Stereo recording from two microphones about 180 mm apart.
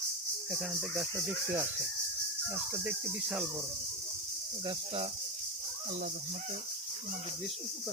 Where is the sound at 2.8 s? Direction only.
10° right (ahead or behind).